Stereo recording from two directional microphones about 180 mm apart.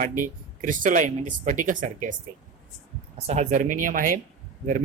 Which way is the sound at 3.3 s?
40° right (ahead or behind).